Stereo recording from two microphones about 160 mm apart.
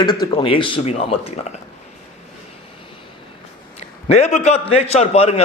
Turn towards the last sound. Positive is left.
turn(degrees=40)  # may be behind; listen again after turning